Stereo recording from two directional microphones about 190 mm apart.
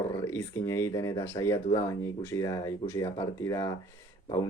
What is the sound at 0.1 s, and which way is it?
Speech, 15° left (ahead or behind).